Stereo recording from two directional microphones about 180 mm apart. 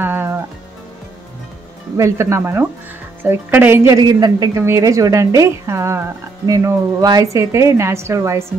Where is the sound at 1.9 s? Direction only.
15° right (ahead or behind).